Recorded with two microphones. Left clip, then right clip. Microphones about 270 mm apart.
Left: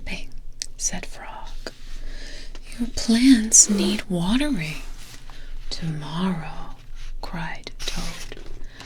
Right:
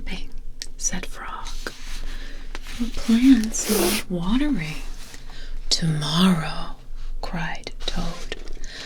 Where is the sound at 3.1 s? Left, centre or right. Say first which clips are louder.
Left 3 dB; left.